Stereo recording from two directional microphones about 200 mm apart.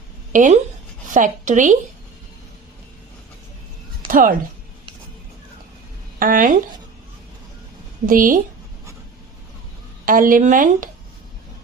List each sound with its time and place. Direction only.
0.3 s a woman's voice: 40° right (ahead or behind)
4.1 s speech: 40° right (ahead or behind)
6.1 s speech: 45° right (ahead or behind)
8.0 s speech: 45° right (ahead or behind)
10.1 s speech: 45° right (ahead or behind)